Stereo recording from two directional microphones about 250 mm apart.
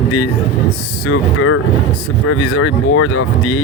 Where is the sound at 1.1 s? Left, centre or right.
Left.